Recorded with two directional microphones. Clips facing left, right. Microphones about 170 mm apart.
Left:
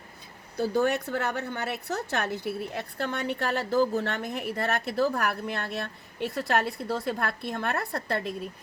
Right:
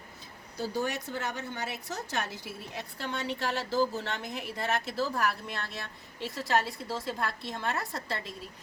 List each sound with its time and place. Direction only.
0.5 s a woman's voice: 55° left (ahead or behind)